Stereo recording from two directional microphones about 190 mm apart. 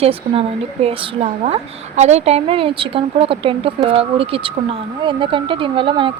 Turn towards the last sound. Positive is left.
turn(degrees=-25)  # may be behind; listen again after turning